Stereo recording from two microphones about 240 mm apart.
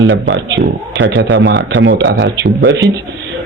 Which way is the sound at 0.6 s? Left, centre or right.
Right.